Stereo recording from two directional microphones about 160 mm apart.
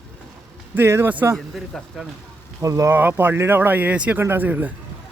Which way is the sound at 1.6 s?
Centre (ahead or behind).